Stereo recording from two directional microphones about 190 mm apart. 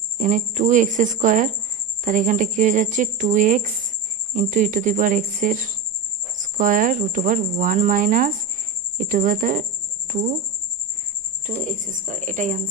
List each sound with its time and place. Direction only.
0.2 s speech: 40° right (ahead or behind)
11.4 s speech: 40° right (ahead or behind)